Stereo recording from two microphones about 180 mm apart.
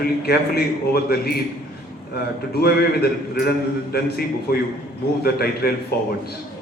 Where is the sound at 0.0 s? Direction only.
60° left (ahead or behind).